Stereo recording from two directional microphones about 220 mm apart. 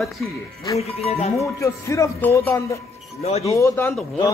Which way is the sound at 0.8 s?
30° left (ahead or behind).